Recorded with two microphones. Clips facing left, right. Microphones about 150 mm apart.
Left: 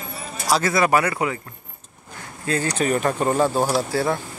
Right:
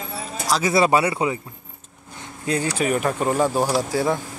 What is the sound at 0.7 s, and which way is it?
Speech, 20° right (ahead or behind).